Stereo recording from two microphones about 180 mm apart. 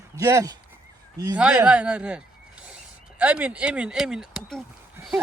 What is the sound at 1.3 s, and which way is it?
Speech, 5° right (ahead or behind).